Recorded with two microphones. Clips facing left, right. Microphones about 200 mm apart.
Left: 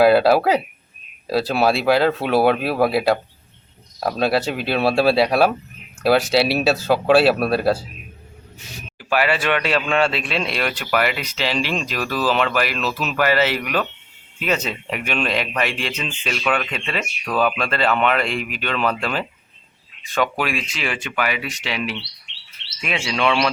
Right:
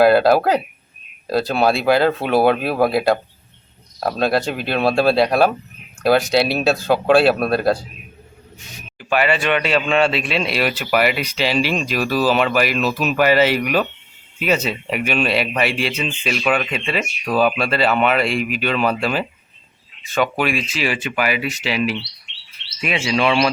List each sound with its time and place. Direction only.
0.0 s speech: 5° left (ahead or behind)
9.0 s speech: 5° left (ahead or behind)